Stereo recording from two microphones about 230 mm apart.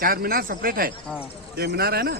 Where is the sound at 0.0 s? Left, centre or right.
Right.